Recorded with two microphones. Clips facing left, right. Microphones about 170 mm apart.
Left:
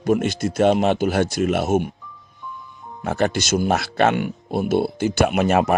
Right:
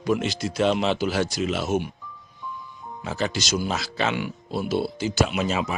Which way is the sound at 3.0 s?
55° left (ahead or behind).